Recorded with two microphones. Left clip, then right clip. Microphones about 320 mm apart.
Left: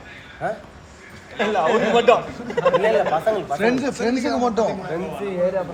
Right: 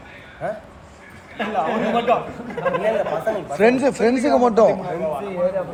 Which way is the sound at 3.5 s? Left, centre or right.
Right.